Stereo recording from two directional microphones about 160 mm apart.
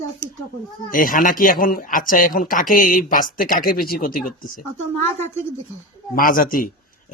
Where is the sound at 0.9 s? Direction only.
60° left (ahead or behind).